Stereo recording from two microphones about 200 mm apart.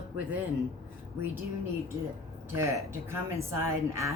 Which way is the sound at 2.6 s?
10° right (ahead or behind).